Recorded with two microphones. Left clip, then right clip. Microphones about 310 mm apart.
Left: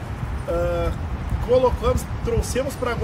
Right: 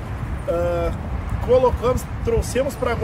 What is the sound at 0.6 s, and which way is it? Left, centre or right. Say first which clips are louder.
Speech: even; centre.